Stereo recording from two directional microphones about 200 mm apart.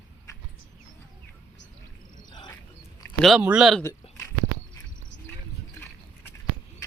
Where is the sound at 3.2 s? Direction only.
5° right (ahead or behind).